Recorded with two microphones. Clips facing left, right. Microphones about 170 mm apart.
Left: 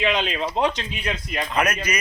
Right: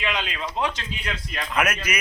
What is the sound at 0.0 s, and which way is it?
Speech, 25° left (ahead or behind).